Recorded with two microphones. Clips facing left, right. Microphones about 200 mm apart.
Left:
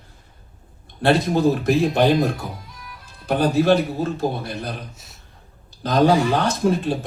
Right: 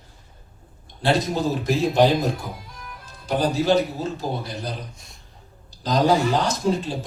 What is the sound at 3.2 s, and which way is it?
Speech, 55° left (ahead or behind).